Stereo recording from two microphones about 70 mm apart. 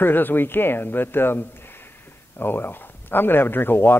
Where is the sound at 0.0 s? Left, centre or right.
Left.